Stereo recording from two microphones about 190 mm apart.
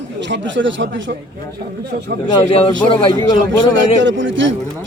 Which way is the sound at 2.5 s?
30° left (ahead or behind).